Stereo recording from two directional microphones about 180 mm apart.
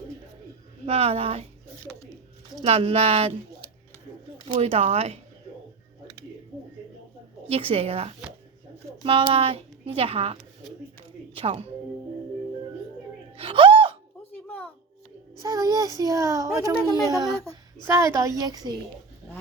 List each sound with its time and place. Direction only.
0.9 s a woman's voice: 35° right (ahead or behind)
2.6 s a woman's voice: 30° right (ahead or behind)
4.4 s a woman's voice: 35° right (ahead or behind)
7.4 s a woman's voice: 30° right (ahead or behind)
11.3 s speech: 30° right (ahead or behind)
13.3 s gasp: 30° right (ahead or behind)
14.3 s a sound: 10° left (ahead or behind)
15.4 s a child's voice: 20° right (ahead or behind)